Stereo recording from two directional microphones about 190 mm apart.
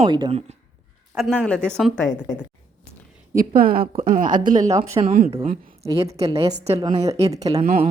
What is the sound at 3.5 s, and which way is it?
A woman's voice, 50° right (ahead or behind).